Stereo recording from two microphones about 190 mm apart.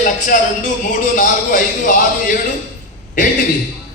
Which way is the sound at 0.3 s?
45° left (ahead or behind).